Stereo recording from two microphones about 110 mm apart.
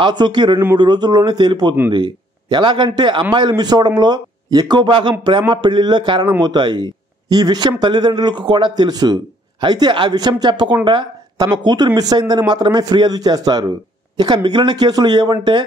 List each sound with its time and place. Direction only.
0.0 s a man's voice: 45° right (ahead or behind)